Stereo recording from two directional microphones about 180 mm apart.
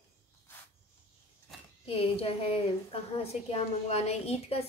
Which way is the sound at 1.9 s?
35° left (ahead or behind).